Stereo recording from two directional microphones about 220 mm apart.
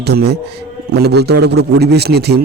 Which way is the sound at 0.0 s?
45° right (ahead or behind).